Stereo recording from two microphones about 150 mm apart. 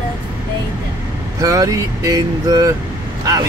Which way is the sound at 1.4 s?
20° right (ahead or behind).